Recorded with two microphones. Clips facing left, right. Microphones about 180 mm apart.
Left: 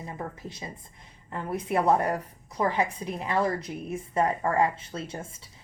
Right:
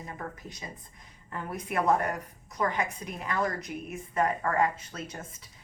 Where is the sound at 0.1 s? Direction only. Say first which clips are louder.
Left 4 dB; 25° left (ahead or behind).